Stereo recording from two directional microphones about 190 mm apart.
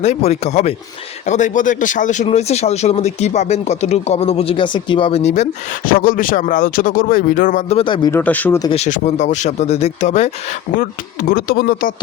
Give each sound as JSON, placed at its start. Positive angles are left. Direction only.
{"t": 0.0, "sound": "speech", "side_deg": 35}
{"t": 8.1, "sound": "speech", "side_deg": 10}
{"t": 8.7, "sound": "speech", "side_deg": 35}